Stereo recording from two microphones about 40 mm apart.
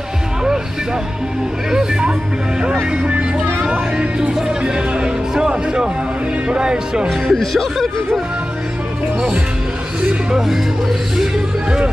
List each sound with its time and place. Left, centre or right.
1.7 s speech: centre
3.6 s music: right
7.1 s speech: centre
10.3 s speech: centre